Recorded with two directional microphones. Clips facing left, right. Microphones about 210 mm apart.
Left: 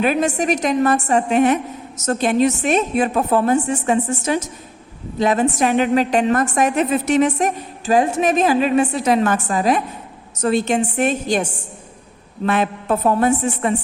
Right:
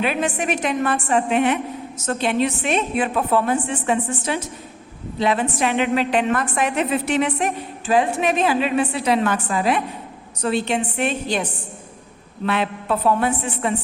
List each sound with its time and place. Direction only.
0.0 s a woman's voice: 45° left (ahead or behind)